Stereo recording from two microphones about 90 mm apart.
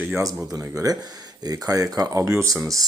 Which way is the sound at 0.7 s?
40° right (ahead or behind).